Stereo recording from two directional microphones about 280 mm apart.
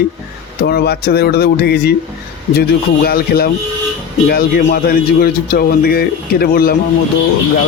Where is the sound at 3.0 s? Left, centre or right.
Left.